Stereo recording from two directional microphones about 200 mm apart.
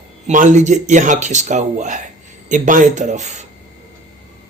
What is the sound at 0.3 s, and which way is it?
Speech, 35° right (ahead or behind).